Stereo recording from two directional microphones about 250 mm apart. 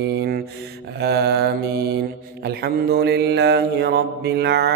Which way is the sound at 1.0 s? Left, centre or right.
Right.